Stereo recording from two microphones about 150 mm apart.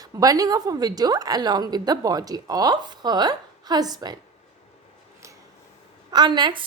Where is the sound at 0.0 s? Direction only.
25° right (ahead or behind).